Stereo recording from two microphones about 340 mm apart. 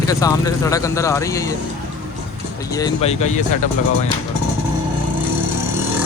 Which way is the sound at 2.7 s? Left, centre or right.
Centre.